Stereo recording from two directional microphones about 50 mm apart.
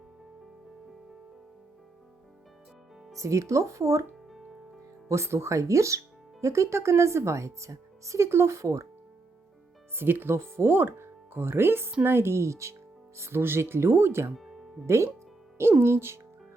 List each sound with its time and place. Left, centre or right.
3.2 s speech: right
5.0 s speech: right
6.4 s speech: right
10.0 s speech: right
10.3 s speech: right
13.1 s speech: right
14.8 s speech: right
15.8 s speech: right